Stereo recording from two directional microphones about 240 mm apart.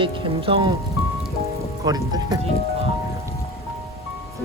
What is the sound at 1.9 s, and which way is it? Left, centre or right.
Speech, centre.